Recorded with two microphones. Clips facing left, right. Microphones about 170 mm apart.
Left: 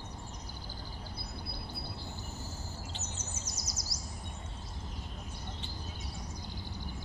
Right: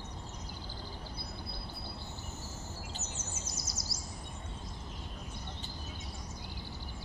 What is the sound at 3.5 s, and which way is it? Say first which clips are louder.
Bird vocalization: right 1 dB; 25° right (ahead or behind).